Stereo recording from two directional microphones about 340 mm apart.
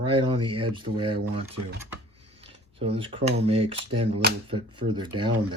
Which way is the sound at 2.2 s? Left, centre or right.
Centre.